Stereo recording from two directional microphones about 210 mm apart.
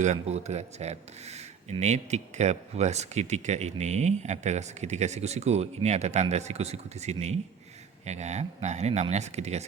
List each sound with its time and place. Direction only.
0.0 s speech: 35° right (ahead or behind)